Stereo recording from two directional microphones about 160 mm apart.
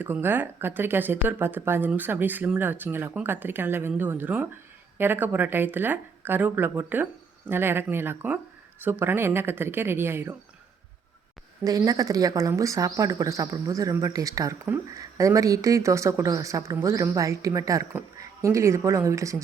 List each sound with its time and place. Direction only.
0.0 s speech: 15° right (ahead or behind)
11.6 s speech: 20° right (ahead or behind)